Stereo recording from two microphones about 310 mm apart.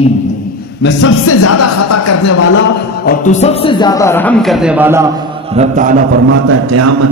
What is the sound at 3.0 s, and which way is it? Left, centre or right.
Speech, left.